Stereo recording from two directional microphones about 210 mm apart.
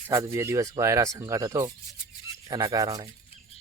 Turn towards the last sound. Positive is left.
turn(degrees=-15)  # may be behind; listen again after turning